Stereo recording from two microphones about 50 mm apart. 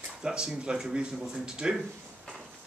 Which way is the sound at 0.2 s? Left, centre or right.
Centre.